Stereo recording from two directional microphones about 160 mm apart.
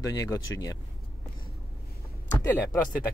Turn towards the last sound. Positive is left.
turn(degrees=10)  # may be behind; listen again after turning